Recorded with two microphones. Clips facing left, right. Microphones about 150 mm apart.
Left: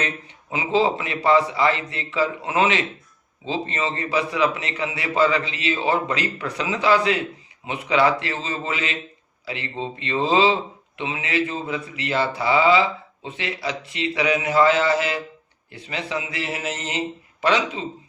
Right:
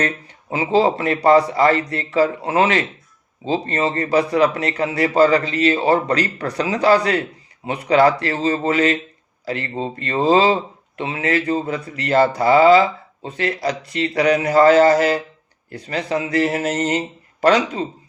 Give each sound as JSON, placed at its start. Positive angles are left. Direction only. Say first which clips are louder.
{"t": 0.5, "sound": "a man's voice", "louder": "right 4 dB", "side_deg": -35}